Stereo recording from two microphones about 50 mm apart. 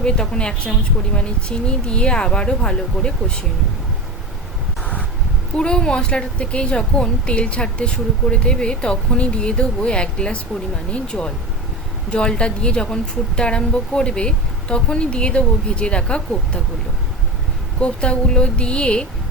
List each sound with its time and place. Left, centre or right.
0.0 s a woman's voice: centre
5.5 s a woman's voice: centre
17.7 s a woman's voice: left